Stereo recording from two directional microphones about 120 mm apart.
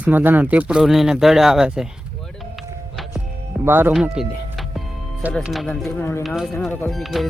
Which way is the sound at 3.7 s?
15° right (ahead or behind).